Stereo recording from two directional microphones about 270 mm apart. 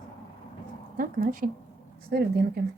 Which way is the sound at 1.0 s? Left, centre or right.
Right.